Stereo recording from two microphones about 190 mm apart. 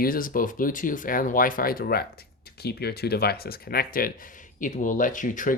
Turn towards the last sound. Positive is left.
turn(degrees=45)  # may be behind; listen again after turning